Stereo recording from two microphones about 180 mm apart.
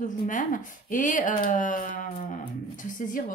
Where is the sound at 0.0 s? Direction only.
45° left (ahead or behind).